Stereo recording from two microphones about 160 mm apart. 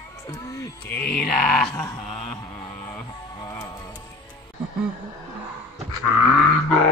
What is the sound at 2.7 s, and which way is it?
Music, 20° left (ahead or behind).